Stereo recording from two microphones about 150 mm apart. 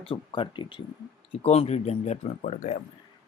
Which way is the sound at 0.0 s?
35° left (ahead or behind).